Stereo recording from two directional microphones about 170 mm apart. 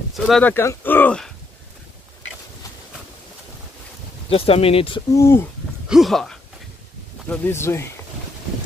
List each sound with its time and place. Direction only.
0.1 s speech: 5° left (ahead or behind)
4.3 s speech: 35° left (ahead or behind)
5.1 s speech: 15° left (ahead or behind)
5.9 s speech: centre (ahead or behind)
7.2 s speech: 15° left (ahead or behind)